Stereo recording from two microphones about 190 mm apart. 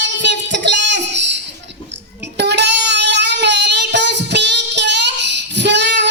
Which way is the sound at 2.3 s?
65° right (ahead or behind).